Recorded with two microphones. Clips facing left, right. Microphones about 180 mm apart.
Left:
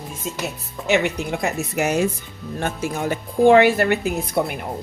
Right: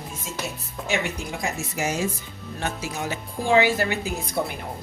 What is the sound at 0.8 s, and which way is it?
A woman's voice, 65° left (ahead or behind).